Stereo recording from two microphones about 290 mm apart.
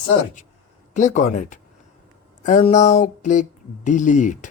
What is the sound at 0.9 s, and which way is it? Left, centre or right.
Speech, left.